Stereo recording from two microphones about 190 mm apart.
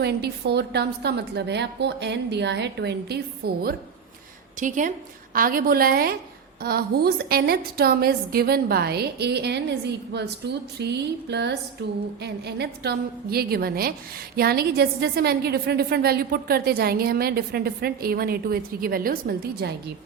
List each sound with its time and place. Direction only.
0.0 s a woman's voice: 60° right (ahead or behind)
4.6 s a woman's voice: 40° right (ahead or behind)